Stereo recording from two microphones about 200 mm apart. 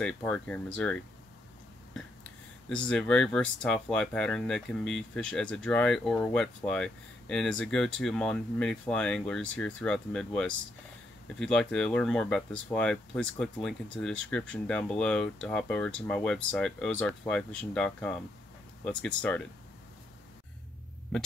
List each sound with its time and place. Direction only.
0.0 s speech: 5° left (ahead or behind)
2.7 s speech: 5° left (ahead or behind)